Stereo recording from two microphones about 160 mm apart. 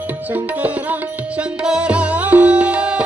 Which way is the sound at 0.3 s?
10° right (ahead or behind).